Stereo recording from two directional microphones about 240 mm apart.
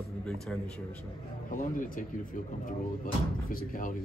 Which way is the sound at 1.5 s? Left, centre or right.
Left.